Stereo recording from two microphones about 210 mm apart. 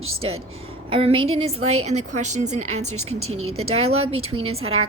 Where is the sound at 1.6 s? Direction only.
90° right.